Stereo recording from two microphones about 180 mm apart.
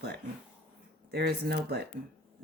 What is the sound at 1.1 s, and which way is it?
Speech, 65° right (ahead or behind).